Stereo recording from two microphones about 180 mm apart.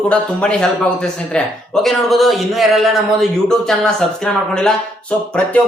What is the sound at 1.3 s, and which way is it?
A man's voice, centre (ahead or behind).